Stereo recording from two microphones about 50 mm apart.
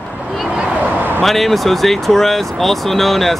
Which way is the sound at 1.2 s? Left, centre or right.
Centre.